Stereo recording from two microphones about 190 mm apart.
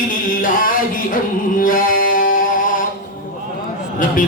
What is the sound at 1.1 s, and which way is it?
Music, 45° left (ahead or behind).